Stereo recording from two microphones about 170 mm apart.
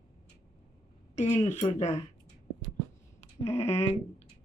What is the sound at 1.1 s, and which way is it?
Speech, 45° left (ahead or behind).